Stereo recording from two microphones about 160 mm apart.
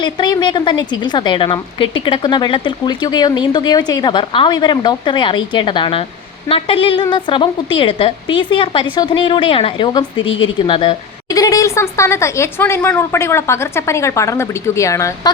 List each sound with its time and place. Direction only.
0.0 s a woman's voice: 30° left (ahead or behind)
11.3 s speech: 20° left (ahead or behind)